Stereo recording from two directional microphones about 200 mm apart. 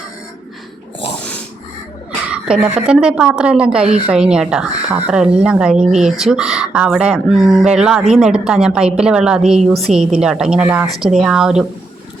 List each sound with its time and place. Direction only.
1.0 s dog: 60° left (ahead or behind)
2.3 s speech: 5° right (ahead or behind)